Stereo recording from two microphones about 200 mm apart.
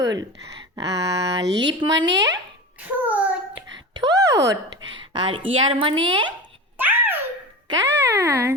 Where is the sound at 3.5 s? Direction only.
20° right (ahead or behind).